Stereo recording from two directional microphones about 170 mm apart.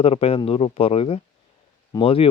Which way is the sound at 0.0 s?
35° left (ahead or behind).